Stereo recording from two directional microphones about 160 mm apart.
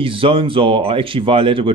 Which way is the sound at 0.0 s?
35° right (ahead or behind).